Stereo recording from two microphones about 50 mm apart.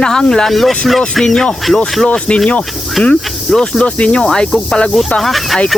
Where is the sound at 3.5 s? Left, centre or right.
Centre.